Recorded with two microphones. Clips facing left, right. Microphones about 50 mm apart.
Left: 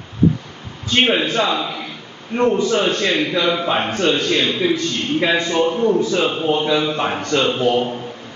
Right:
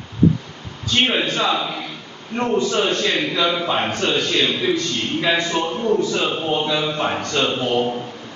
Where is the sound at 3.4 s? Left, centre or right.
Centre.